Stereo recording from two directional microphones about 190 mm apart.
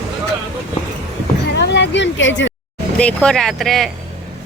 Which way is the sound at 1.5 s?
65° left (ahead or behind).